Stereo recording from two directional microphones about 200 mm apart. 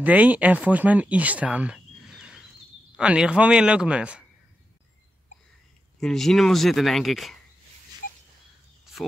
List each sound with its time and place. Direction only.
0.0 s speech: 10° right (ahead or behind)
5.9 s speech: centre (ahead or behind)